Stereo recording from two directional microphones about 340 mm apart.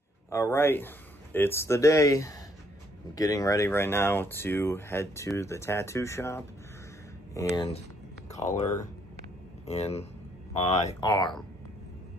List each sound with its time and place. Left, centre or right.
0.3 s speech: centre
8.3 s a sound: centre
9.7 s speech: centre